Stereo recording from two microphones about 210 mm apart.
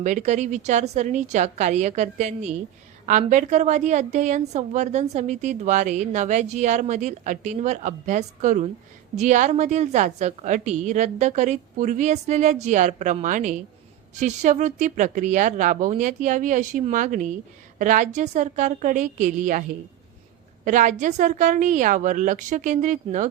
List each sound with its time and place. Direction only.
0.0 s a woman's voice: 35° right (ahead or behind)
20.7 s a woman's voice: 35° right (ahead or behind)